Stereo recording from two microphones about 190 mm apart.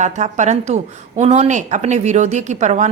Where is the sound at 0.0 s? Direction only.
40° right (ahead or behind).